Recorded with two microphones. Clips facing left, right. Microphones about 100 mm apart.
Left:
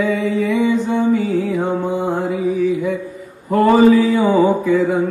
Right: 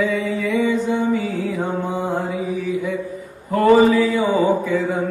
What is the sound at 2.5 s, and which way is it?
Mantra, 40° left (ahead or behind).